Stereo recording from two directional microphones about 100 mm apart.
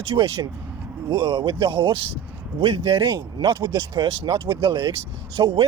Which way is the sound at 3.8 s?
45° right (ahead or behind).